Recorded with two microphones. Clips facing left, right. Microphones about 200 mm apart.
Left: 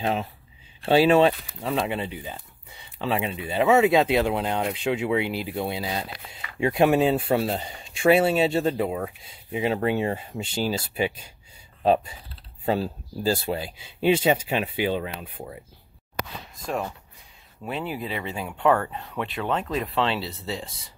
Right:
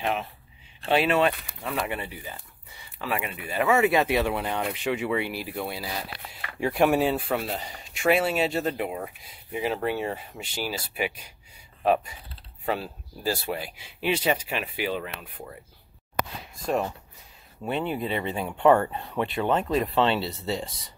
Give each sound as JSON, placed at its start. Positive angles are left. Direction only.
{"t": 0.0, "sound": "speech", "side_deg": 30}
{"t": 17.6, "sound": "speech", "side_deg": 0}